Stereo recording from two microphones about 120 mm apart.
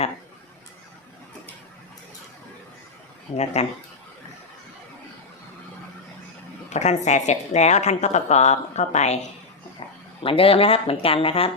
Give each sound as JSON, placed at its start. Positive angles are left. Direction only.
{"t": 3.3, "sound": "speech", "side_deg": 65}
{"t": 6.7, "sound": "a woman's voice", "side_deg": 75}
{"t": 10.2, "sound": "speech", "side_deg": 50}